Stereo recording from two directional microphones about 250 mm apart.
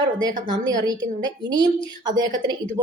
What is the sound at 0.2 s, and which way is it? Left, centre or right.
A woman's voice, centre.